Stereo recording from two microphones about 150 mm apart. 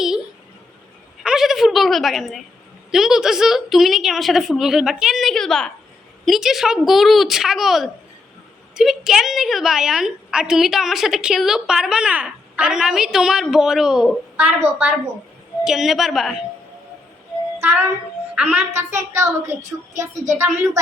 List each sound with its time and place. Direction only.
1.2 s a sound: 5° right (ahead or behind)
2.9 s a woman's voice: 5° right (ahead or behind)
17.6 s a woman's voice: 15° right (ahead or behind)